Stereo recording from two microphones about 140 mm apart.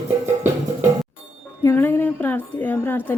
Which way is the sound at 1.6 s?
15° left (ahead or behind).